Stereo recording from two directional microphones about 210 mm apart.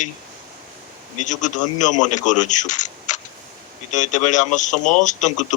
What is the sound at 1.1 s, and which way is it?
A man's voice, 35° left (ahead or behind).